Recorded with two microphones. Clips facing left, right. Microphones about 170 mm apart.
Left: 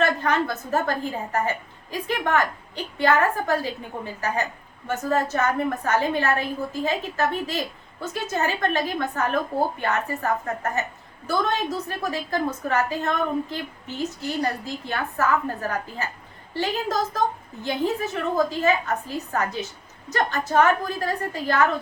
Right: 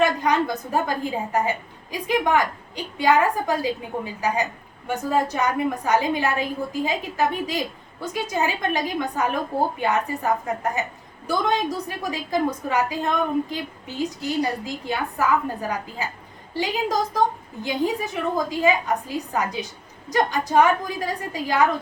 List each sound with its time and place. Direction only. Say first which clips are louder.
0.0 s a woman's voice: right 2 dB; 15° right (ahead or behind)